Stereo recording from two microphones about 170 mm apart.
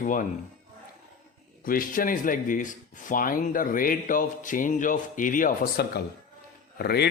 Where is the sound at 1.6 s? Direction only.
55° left (ahead or behind).